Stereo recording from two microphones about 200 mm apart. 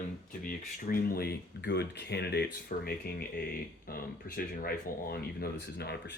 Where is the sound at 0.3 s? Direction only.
45° left (ahead or behind).